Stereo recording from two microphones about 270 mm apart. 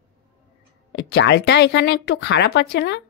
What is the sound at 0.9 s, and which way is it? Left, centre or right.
A woman's voice, left.